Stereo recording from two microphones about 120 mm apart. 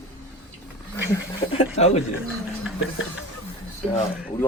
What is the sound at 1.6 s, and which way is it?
Speech, 65° left (ahead or behind).